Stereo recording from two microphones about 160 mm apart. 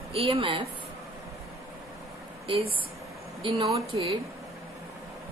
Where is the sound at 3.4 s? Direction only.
30° right (ahead or behind).